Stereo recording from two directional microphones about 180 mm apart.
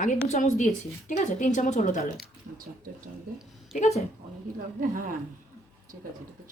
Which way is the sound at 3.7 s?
40° left (ahead or behind).